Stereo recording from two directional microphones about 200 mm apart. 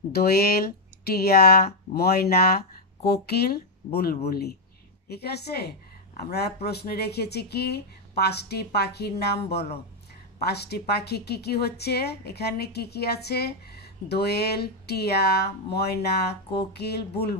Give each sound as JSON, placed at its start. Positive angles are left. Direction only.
{"t": 0.1, "sound": "a woman's voice", "side_deg": 50}